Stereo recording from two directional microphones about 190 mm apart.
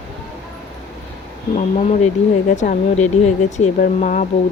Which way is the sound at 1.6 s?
35° left (ahead or behind).